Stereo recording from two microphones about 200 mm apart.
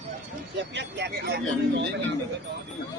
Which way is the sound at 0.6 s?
60° right (ahead or behind).